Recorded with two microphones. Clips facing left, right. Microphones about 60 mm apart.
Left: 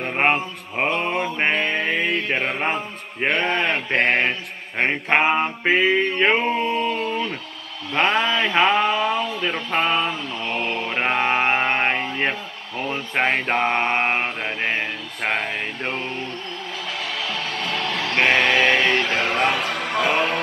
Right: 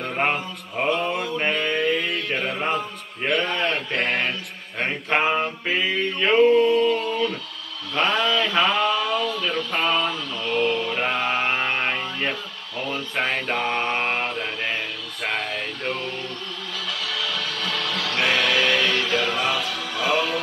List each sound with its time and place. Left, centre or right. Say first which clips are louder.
0.0 s mantra: left 3 dB; left
7.9 s a sound: left 2 dB; left
16.9 s music: even; left